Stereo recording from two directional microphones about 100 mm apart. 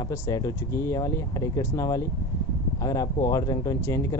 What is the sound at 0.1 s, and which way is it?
Speech, 30° left (ahead or behind).